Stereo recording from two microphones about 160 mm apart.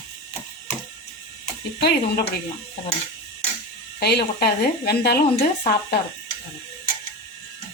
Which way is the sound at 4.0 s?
90° left.